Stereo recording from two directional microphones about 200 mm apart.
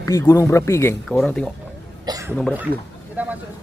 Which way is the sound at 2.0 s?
15° right (ahead or behind).